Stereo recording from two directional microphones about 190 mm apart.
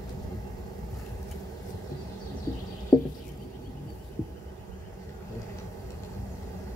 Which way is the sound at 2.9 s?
20° left (ahead or behind).